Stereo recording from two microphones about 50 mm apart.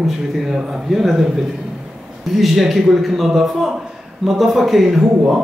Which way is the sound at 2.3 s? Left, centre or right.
Centre.